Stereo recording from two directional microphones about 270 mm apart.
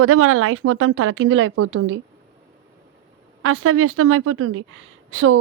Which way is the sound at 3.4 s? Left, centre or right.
Right.